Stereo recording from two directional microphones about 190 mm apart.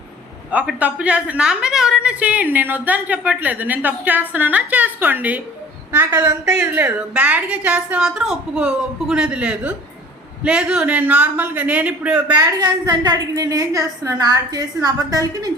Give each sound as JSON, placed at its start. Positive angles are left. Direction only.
{"t": 0.5, "sound": "a woman's voice", "side_deg": -5}
{"t": 12.3, "sound": "a woman's voice", "side_deg": -20}